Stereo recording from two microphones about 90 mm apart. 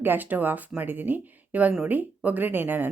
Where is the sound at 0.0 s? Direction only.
20° right (ahead or behind).